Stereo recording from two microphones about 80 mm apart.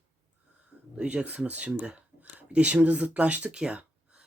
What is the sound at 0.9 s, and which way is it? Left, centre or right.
Speech, centre.